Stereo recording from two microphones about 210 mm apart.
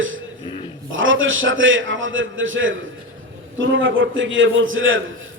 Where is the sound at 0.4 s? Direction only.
25° left (ahead or behind).